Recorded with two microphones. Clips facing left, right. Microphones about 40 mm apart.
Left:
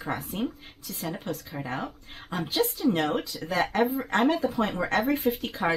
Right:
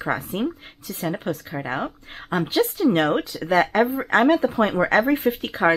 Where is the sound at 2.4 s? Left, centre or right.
Right.